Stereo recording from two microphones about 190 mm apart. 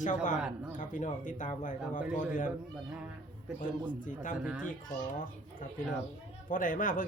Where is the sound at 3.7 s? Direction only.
45° left (ahead or behind).